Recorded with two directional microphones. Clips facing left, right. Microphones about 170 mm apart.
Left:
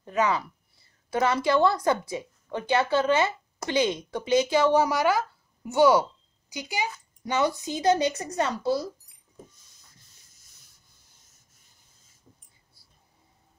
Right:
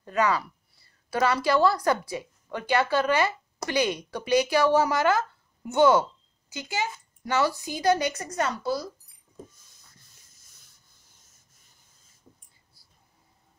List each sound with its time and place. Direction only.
0.0 s a woman's voice: 20° left (ahead or behind)